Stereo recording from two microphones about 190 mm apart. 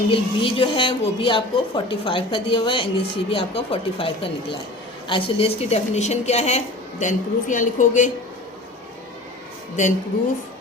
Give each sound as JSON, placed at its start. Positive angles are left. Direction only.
{"t": 0.1, "sound": "a woman's voice", "side_deg": 30}